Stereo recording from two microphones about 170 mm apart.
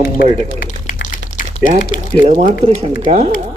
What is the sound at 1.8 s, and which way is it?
Speech, 50° left (ahead or behind).